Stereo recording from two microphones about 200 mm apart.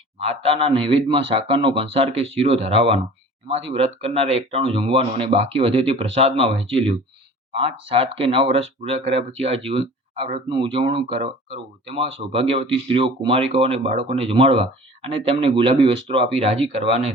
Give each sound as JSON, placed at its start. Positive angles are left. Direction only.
{"t": 0.2, "sound": "speech", "side_deg": -30}